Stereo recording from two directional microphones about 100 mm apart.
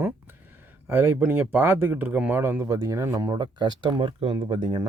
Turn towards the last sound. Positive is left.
turn(degrees=-60)  # may be behind; listen again after turning